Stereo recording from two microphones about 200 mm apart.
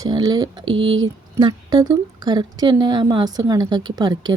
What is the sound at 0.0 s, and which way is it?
Speech, 20° right (ahead or behind).